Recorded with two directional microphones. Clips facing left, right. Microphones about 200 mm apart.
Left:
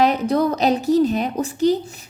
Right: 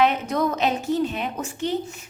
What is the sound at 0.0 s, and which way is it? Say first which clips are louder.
A woman's voice: left 4 dB; 35° left (ahead or behind).